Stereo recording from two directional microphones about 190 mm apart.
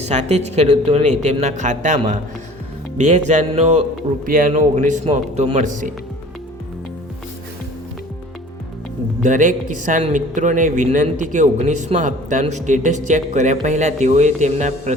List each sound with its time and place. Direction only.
0.0 s a man's voice: 35° right (ahead or behind)
4.3 s a man's voice: 45° right (ahead or behind)
9.2 s a man's voice: 45° right (ahead or behind)